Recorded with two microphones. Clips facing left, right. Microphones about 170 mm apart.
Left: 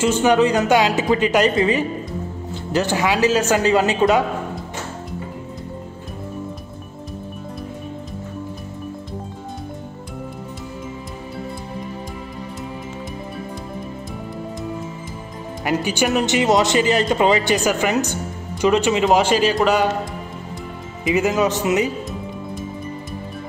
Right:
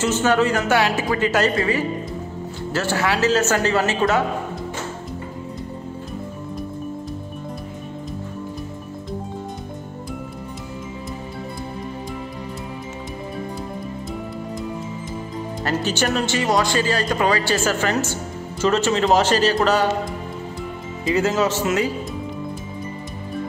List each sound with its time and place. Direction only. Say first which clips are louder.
0.0 s a man's voice: left 3 dB; 15° left (ahead or behind)
15.6 s a man's voice: left 2 dB; 15° left (ahead or behind)
21.0 s a man's voice: left 1 dB; 15° left (ahead or behind)